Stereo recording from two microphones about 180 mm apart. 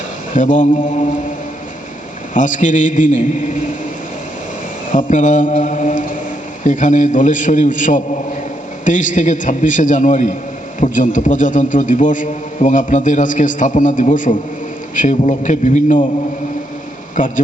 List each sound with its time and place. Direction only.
0.3 s a man's voice: 45° left (ahead or behind)
2.3 s a man's voice: 45° left (ahead or behind)
4.9 s a man's voice: 45° left (ahead or behind)
17.2 s a man's voice: 45° left (ahead or behind)